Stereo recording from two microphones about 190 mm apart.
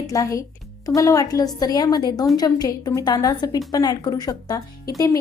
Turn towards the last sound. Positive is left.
turn(degrees=20)  # may be behind; listen again after turning